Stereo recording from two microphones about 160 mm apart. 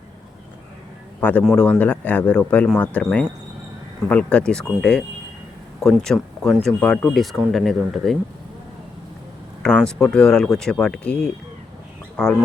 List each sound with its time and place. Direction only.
1.2 s speech: 10° left (ahead or behind)
9.6 s speech: 5° left (ahead or behind)